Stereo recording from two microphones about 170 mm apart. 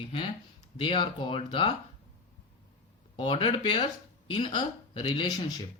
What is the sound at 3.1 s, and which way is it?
Speech, 30° left (ahead or behind).